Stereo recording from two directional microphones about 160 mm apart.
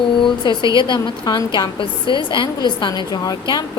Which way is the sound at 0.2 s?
30° left (ahead or behind).